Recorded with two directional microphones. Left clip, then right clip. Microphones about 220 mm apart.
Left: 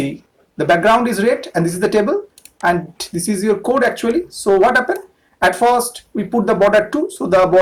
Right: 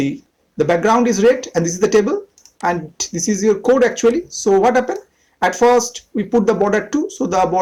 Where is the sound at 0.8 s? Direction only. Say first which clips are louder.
Even; 30° right (ahead or behind).